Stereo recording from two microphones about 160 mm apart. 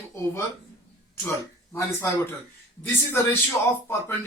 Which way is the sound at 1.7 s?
15° left (ahead or behind).